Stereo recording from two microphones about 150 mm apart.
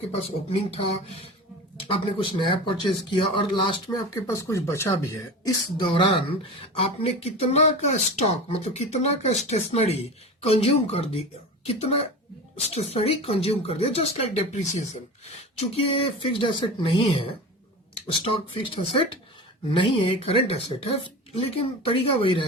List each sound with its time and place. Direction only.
1.9 s speech: 35° left (ahead or behind)
4.3 s speech: 20° left (ahead or behind)
5.7 s speech: 35° left (ahead or behind); by 14.8 s 50° left (ahead or behind)
15.5 s speech: 40° left (ahead or behind)